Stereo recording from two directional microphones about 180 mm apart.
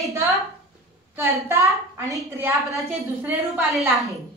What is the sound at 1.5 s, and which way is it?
A woman's voice, 15° right (ahead or behind).